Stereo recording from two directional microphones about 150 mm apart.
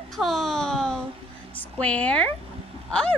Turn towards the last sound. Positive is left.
turn(degrees=5)  # may be behind; listen again after turning